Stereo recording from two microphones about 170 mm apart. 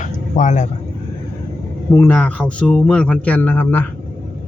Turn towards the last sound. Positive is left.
turn(degrees=10)  # may be behind; listen again after turning